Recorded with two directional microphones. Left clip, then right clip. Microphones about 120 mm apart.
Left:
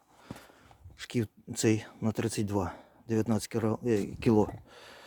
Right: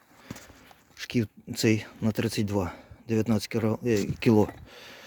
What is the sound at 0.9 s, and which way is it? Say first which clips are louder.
Speech: right 4 dB; 10° right (ahead or behind).